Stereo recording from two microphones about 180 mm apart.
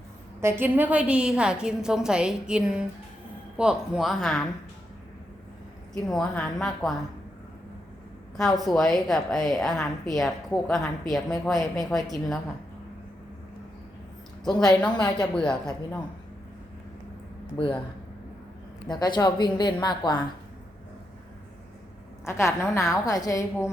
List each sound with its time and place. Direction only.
0.4 s a woman's voice: 10° right (ahead or behind)
5.9 s a woman's voice: 5° left (ahead or behind)
8.4 s a woman's voice: centre (ahead or behind)
15.2 s a woman's voice: 5° left (ahead or behind)
17.6 s speech: 30° left (ahead or behind)
18.9 s a woman's voice: 25° left (ahead or behind)
22.2 s a woman's voice: 15° left (ahead or behind)